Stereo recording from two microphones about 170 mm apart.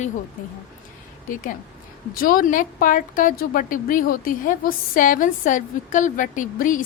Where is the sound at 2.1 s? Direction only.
55° left (ahead or behind).